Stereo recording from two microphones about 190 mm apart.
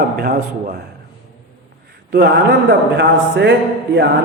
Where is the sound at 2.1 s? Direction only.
60° right (ahead or behind).